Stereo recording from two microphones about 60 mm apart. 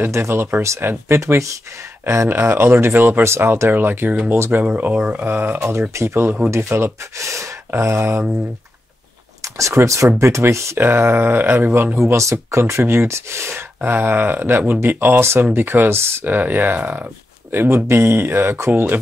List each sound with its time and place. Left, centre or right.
0.1 s speech: right
2.2 s speech: right
5.2 s speech: right
7.8 s speech: right
9.4 s speech: right
12.1 s speech: right
13.7 s speech: right
16.3 s speech: right